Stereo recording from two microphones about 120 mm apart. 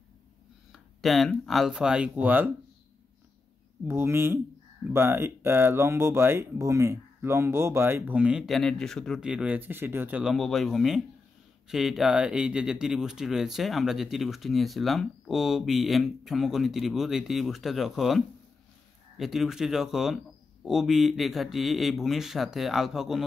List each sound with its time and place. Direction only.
0.7 s speech: centre (ahead or behind)
3.8 s speech: 20° right (ahead or behind)
8.2 s speech: 5° right (ahead or behind)
9.2 s speech: 10° right (ahead or behind)
10.3 s speech: centre (ahead or behind)